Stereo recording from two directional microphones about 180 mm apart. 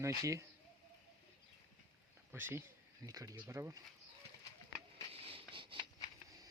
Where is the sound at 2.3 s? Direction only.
10° right (ahead or behind).